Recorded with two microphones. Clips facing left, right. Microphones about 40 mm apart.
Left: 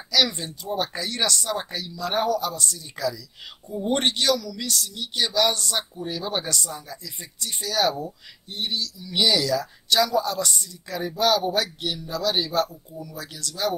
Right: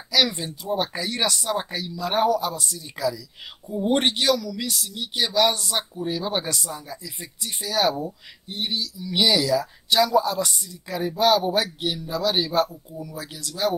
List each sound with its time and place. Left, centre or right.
0.1 s speech: centre